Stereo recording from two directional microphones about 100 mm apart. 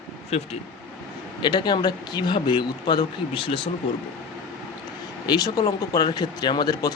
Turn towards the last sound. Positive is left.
turn(degrees=45)  # may be behind; listen again after turning